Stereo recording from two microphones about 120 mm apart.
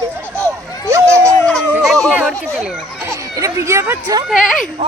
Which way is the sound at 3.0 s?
25° right (ahead or behind).